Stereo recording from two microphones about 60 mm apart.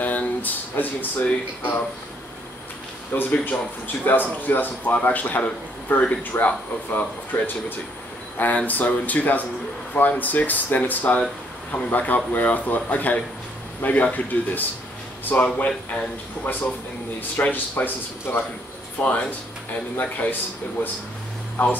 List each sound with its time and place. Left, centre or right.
0.0 s speech: left
3.3 s a man's voice: left
16.5 s speech: left
19.0 s a man's voice: left
20.0 s speech: left